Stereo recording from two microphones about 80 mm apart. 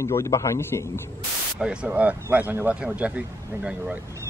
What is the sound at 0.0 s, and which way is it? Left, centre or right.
A man's voice, left.